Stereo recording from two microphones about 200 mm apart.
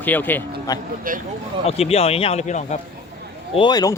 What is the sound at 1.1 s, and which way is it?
Speech, 45° right (ahead or behind).